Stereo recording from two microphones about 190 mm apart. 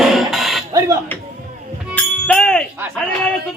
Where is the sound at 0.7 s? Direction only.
15° right (ahead or behind).